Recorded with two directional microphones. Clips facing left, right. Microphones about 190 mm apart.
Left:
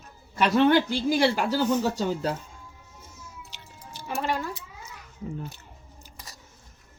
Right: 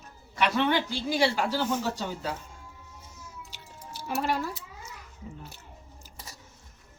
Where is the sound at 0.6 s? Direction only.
50° left (ahead or behind).